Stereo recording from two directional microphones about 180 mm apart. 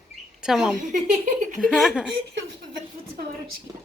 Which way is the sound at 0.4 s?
Centre (ahead or behind).